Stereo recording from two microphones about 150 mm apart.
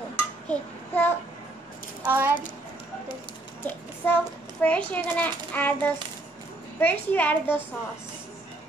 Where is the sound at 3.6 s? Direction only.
10° left (ahead or behind).